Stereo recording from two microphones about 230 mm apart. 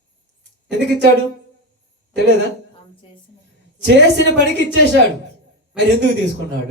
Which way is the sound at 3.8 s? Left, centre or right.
Right.